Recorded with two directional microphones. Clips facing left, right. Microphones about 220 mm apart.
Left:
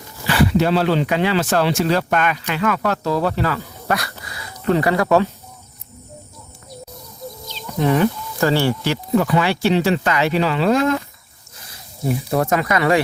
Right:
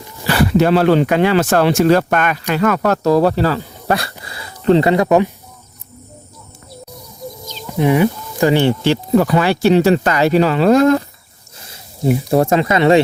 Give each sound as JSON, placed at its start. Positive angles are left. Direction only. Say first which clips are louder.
{"t": 0.3, "sound": "speech", "louder": "right 3 dB", "side_deg": -45}
{"t": 4.2, "sound": "a sound", "louder": "right 2 dB", "side_deg": -30}
{"t": 5.0, "sound": "speech", "louder": "right 3 dB", "side_deg": -15}
{"t": 7.7, "sound": "speech", "louder": "right 3 dB", "side_deg": -15}
{"t": 12.3, "sound": "speech", "louder": "right 4 dB", "side_deg": -30}